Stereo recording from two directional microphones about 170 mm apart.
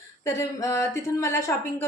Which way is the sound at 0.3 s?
15° left (ahead or behind).